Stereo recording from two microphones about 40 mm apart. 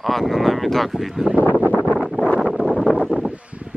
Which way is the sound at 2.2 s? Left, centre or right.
Left.